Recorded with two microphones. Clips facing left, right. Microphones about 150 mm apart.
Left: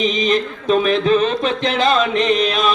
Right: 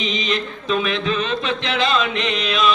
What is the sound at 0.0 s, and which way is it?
Speech, 45° left (ahead or behind).